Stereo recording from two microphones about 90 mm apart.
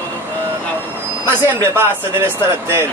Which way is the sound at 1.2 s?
25° right (ahead or behind).